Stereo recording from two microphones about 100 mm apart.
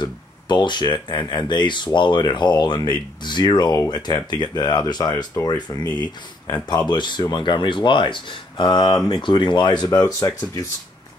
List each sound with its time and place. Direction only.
0.0 s speech: 50° left (ahead or behind)
5.3 s speech: 35° left (ahead or behind); by 9.8 s 50° left (ahead or behind)
9.8 s speech: 35° left (ahead or behind)